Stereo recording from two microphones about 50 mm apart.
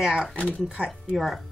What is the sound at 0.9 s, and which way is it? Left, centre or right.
Speech, centre.